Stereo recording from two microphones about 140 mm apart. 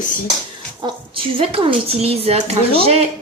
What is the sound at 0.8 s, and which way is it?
Speech, 35° right (ahead or behind).